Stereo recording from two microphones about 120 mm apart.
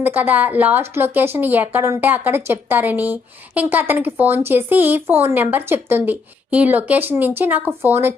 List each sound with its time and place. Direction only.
0.0 s speech: 15° right (ahead or behind)